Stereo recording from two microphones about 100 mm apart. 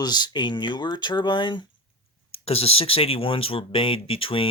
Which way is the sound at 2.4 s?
90° left.